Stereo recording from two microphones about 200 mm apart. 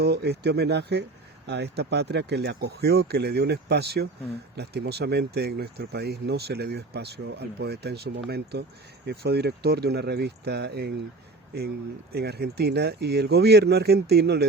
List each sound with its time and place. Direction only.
0.0 s speech: 55° right (ahead or behind)
12.1 s speech: 55° right (ahead or behind)